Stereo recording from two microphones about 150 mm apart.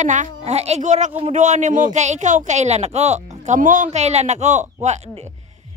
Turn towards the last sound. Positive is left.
turn(degrees=-50)  # may be behind; listen again after turning